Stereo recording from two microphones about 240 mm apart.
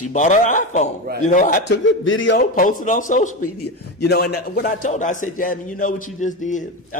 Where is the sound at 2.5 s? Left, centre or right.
Left.